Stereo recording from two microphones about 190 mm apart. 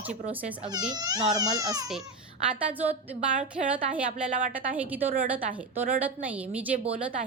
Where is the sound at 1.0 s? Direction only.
20° right (ahead or behind).